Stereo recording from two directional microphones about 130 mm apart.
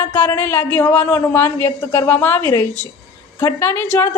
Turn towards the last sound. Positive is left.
turn(degrees=15)  # may be behind; listen again after turning